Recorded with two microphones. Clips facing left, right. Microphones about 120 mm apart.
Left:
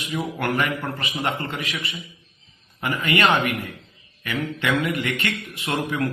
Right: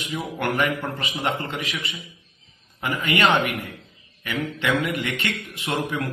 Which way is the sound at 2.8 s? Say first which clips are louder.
Even; 20° right (ahead or behind).